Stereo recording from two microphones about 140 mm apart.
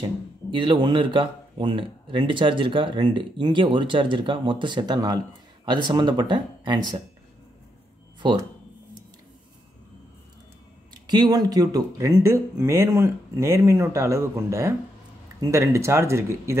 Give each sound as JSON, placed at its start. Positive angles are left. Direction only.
{"t": 0.0, "sound": "speech", "side_deg": -35}
{"t": 10.9, "sound": "speech", "side_deg": -30}